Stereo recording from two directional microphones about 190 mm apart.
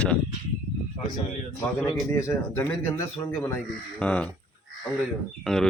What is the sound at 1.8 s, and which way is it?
Speech, 10° left (ahead or behind).